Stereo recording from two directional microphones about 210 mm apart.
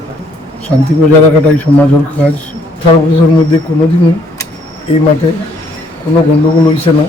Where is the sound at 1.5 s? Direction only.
10° left (ahead or behind).